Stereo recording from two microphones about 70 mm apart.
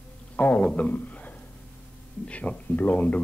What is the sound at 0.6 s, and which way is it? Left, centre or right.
A woman's voice, centre.